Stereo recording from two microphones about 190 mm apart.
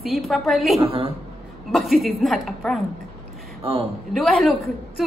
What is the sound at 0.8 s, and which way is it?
Speech, 30° right (ahead or behind).